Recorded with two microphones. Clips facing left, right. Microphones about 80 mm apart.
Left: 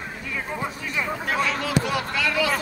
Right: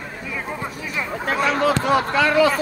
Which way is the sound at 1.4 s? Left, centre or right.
Right.